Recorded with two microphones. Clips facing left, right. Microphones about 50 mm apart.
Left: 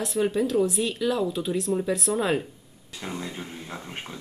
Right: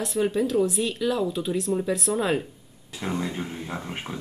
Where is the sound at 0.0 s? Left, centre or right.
Centre.